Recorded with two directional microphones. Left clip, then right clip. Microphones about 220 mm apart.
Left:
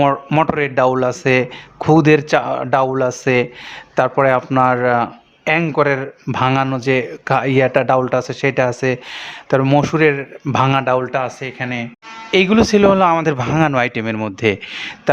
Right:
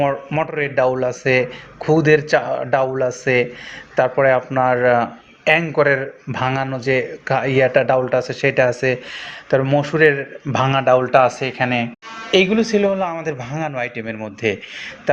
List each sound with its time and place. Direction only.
0.0 s a man's voice: 35° left (ahead or behind)
11.1 s speech: 5° left (ahead or behind)
12.3 s a man's voice: 30° left (ahead or behind)